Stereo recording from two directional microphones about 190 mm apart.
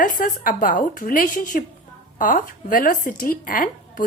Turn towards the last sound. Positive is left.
turn(degrees=45)  # may be behind; listen again after turning